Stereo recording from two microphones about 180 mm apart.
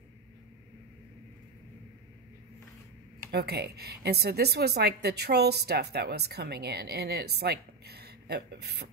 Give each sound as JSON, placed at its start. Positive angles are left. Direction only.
{"t": 3.3, "sound": "a woman's voice", "side_deg": -60}